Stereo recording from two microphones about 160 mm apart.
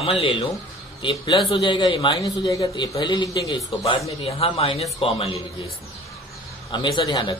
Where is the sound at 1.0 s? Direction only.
25° left (ahead or behind).